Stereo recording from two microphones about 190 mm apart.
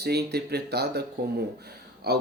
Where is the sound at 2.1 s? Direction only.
60° right (ahead or behind).